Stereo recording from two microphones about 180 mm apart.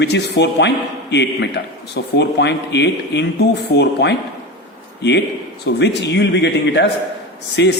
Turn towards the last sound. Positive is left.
turn(degrees=75)  # may be behind; listen again after turning